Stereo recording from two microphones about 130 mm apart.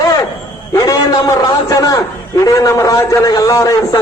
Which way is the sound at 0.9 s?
30° left (ahead or behind).